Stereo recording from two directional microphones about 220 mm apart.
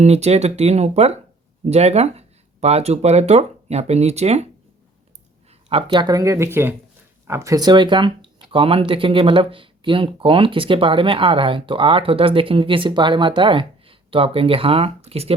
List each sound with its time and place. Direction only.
0.0 s speech: 30° right (ahead or behind)
5.5 s speech: 25° right (ahead or behind)